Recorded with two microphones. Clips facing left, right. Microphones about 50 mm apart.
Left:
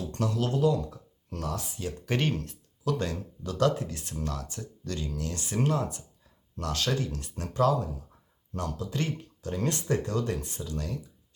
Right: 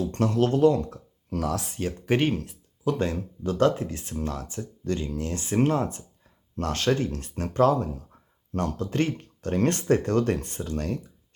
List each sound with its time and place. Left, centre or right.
0.0 s speech: right
1.5 s speech: right
2.0 s speech: right
2.8 s speech: right